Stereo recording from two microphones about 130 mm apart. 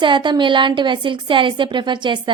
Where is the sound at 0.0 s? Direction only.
35° right (ahead or behind).